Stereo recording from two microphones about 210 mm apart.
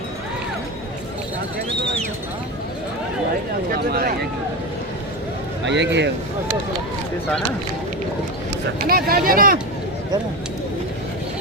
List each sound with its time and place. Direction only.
3.7 s speech: 45° right (ahead or behind)
5.6 s speech: 55° right (ahead or behind)
8.9 s speech: 45° right (ahead or behind)